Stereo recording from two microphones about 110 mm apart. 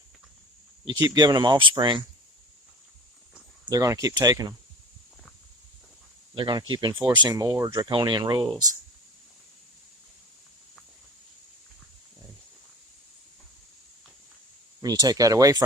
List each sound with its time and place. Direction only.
0.9 s speech: 40° right (ahead or behind)
3.7 s speech: 30° right (ahead or behind)
6.3 s speech: 45° right (ahead or behind)
7.9 s speech: 45° right (ahead or behind)
14.8 s speech: 35° right (ahead or behind)